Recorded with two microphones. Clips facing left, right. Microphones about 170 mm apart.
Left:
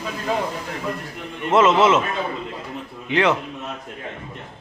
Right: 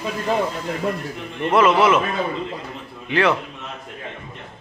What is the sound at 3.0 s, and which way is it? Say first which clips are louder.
Speech: even; 20° left (ahead or behind).